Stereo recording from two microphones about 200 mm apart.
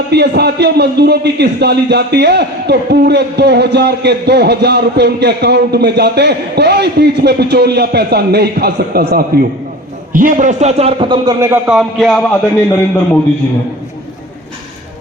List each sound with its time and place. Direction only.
0.1 s a man's voice: 55° right (ahead or behind); by 12.4 s centre (ahead or behind)